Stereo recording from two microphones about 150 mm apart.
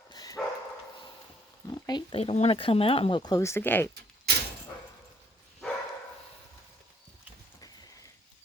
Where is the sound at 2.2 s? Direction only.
45° left (ahead or behind); by 3.9 s 15° left (ahead or behind).